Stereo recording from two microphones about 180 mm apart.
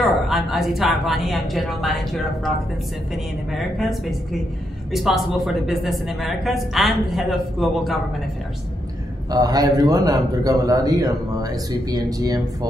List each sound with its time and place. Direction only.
0.0 s a woman's voice: centre (ahead or behind)
3.5 s a woman's voice: centre (ahead or behind)
9.3 s a man's voice: 20° right (ahead or behind)